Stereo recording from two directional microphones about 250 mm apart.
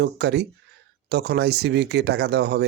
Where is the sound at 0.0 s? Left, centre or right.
Right.